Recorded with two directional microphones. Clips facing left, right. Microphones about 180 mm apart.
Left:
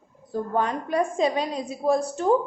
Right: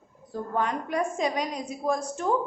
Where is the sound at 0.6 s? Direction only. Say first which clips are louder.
Left 3 dB; 30° left (ahead or behind).